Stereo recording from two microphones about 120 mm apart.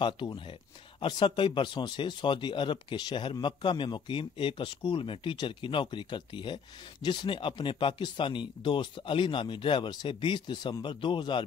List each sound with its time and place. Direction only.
0.4 s speech: 45° left (ahead or behind)